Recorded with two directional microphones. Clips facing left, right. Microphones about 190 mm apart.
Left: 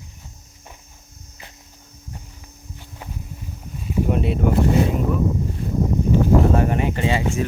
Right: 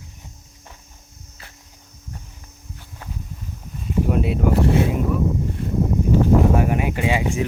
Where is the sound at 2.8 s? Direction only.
15° left (ahead or behind).